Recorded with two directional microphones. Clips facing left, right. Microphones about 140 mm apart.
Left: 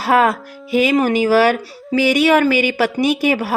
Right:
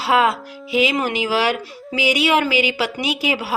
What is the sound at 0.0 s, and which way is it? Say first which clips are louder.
A woman's voice: left 3 dB; 45° left (ahead or behind).